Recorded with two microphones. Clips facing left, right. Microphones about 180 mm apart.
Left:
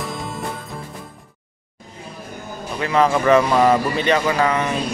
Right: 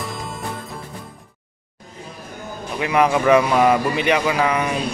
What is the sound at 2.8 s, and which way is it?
A man's voice, 10° right (ahead or behind).